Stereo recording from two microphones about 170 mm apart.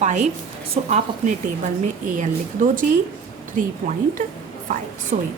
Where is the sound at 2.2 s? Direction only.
50° right (ahead or behind).